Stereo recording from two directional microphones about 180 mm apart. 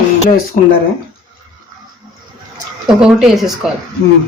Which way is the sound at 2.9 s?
5° right (ahead or behind).